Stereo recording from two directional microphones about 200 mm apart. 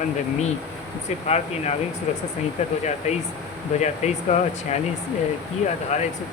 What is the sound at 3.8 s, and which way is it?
Speech, 35° left (ahead or behind).